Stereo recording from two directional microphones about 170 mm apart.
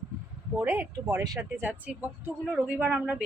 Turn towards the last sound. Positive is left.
turn(degrees=-10)  # may be behind; listen again after turning